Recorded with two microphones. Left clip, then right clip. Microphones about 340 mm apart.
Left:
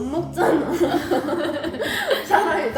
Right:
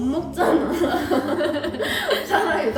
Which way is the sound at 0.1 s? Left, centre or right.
Centre.